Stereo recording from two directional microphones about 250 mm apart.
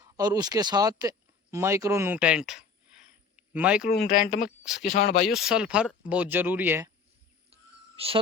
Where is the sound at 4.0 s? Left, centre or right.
Left.